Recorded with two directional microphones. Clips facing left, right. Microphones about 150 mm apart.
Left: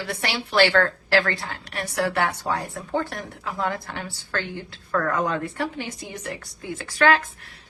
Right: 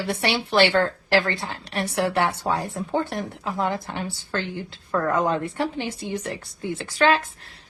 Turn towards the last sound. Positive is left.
turn(degrees=-25)  # may be behind; listen again after turning